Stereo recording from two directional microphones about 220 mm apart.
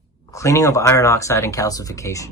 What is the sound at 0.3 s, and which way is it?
Speech, 15° left (ahead or behind).